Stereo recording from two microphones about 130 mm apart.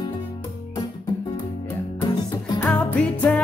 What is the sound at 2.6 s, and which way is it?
Music, 10° left (ahead or behind).